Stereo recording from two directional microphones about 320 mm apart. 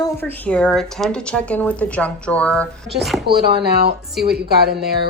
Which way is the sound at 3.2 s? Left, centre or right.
Right.